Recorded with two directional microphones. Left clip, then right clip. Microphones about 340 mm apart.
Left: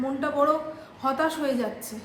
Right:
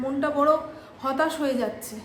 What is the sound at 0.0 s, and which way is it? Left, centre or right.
A woman's voice, centre.